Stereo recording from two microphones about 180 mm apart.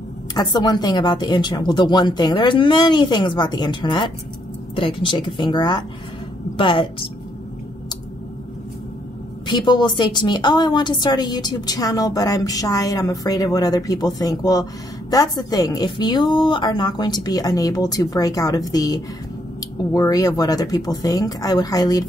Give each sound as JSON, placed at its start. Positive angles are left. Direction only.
{"t": 0.3, "sound": "a woman's voice", "side_deg": 20}
{"t": 9.5, "sound": "a woman's voice", "side_deg": 25}